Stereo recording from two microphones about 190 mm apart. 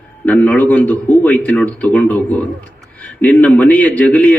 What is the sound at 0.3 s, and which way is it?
Speech, 5° left (ahead or behind).